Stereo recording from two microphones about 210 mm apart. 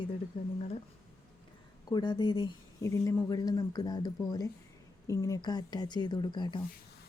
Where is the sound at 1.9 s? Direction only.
20° left (ahead or behind).